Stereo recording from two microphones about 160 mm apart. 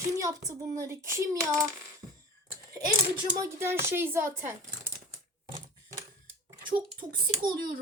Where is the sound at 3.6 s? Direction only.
15° right (ahead or behind).